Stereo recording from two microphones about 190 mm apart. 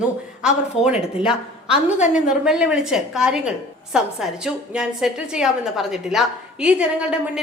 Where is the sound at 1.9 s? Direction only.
40° left (ahead or behind).